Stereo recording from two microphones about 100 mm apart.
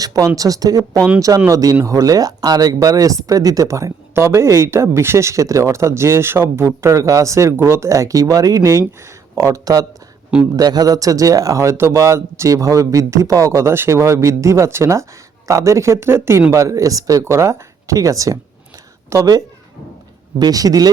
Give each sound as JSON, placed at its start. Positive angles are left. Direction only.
{"t": 0.0, "sound": "speech", "side_deg": -35}
{"t": 20.4, "sound": "speech", "side_deg": -35}